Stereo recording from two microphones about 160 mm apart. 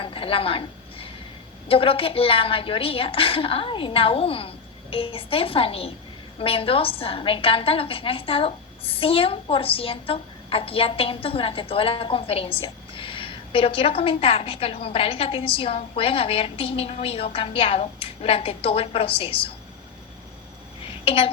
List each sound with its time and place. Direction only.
0.0 s a sound: 35° left (ahead or behind)
1.6 s a woman's voice: 35° left (ahead or behind)
21.0 s a child's voice: 35° left (ahead or behind)